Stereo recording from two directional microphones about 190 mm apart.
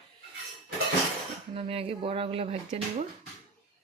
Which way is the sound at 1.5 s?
30° right (ahead or behind).